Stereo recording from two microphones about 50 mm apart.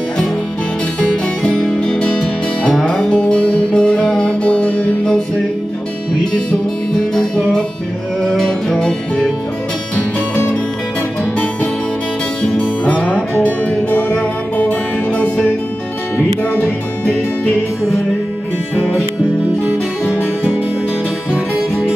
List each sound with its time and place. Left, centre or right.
1.6 s music: left
7.2 s music: centre
12.5 s music: left
18.8 s music: centre